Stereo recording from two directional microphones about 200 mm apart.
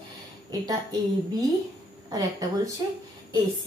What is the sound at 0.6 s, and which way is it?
Speech, 20° right (ahead or behind).